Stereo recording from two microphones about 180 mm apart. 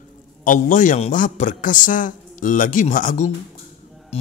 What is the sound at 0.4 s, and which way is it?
A man's voice, 45° left (ahead or behind).